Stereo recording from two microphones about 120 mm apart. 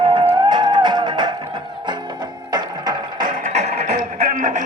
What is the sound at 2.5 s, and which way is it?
Water, 35° right (ahead or behind).